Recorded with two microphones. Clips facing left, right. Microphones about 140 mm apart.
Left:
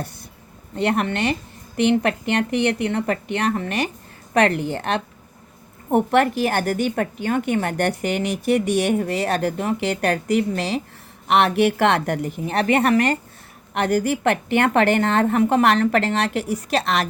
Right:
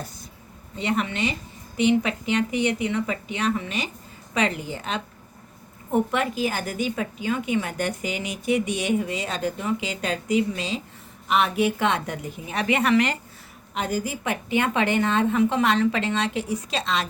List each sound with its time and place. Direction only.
0.8 s a woman's voice: 60° left (ahead or behind)
13.7 s a woman's voice: 70° left (ahead or behind)